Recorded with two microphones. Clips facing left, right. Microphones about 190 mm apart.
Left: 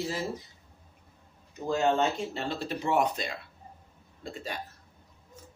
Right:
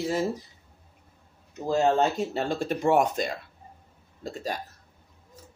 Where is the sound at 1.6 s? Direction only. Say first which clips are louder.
Right 3 dB; 35° right (ahead or behind).